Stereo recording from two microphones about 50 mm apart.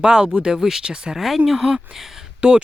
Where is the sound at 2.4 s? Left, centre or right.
Right.